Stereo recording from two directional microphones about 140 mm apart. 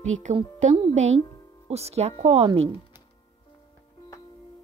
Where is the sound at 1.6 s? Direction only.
50° right (ahead or behind).